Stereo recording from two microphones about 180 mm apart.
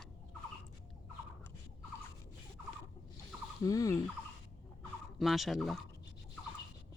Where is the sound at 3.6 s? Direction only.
20° left (ahead or behind).